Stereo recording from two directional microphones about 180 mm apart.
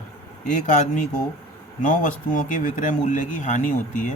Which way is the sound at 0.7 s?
45° left (ahead or behind).